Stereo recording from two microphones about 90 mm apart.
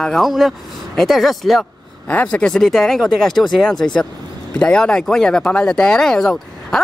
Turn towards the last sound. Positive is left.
turn(degrees=5)  # may be behind; listen again after turning